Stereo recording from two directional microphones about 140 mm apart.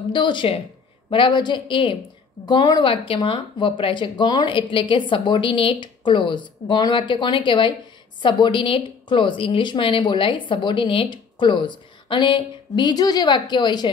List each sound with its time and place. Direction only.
0.1 s a woman's voice: 35° left (ahead or behind)